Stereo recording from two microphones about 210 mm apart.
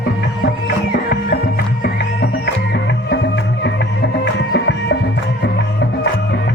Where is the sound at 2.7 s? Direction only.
55° left (ahead or behind).